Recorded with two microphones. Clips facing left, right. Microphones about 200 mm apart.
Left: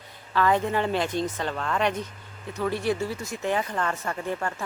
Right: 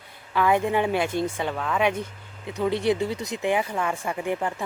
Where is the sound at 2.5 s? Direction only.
15° right (ahead or behind).